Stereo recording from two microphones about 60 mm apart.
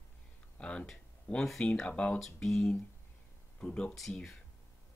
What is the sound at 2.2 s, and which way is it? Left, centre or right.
Speech, centre.